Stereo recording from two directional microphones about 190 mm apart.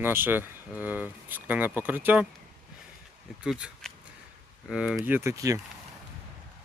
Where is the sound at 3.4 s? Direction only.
Centre (ahead or behind).